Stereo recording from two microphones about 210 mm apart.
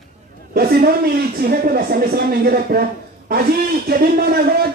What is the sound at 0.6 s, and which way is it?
Speech, 45° right (ahead or behind).